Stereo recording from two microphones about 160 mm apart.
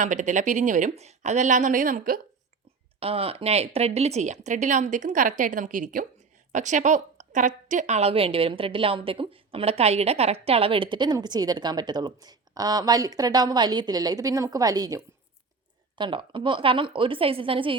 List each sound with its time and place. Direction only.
0.0 s speech: 50° right (ahead or behind)
3.0 s a woman's voice: 35° right (ahead or behind)